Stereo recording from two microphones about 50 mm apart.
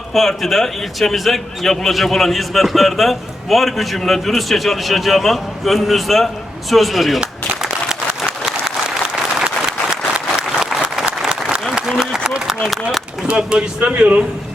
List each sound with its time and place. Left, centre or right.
0.1 s a man's voice: centre
8.3 s applause: centre
11.7 s a sound: centre
13.3 s speech: centre